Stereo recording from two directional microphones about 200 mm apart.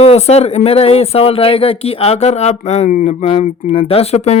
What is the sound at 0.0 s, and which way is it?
Speech, 30° left (ahead or behind).